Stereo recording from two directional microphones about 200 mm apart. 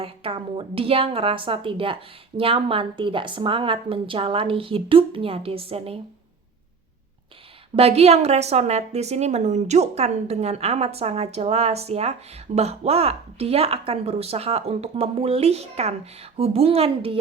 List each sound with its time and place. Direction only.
0.0 s a woman's voice: 30° right (ahead or behind)
7.8 s a woman's voice: 30° right (ahead or behind)